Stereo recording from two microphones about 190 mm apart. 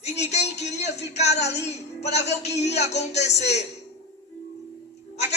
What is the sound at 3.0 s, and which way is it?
Speech, 35° left (ahead or behind).